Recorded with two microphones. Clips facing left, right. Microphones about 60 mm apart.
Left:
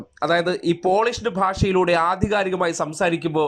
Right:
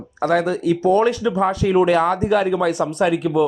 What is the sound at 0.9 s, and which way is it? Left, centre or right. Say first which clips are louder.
Speech: right 3 dB; left.